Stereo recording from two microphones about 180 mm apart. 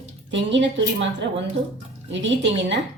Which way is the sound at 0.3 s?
85° right.